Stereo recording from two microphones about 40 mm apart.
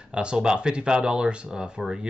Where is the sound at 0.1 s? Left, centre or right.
Right.